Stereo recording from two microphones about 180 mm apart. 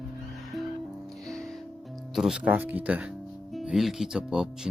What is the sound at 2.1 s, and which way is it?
Speech, 5° right (ahead or behind).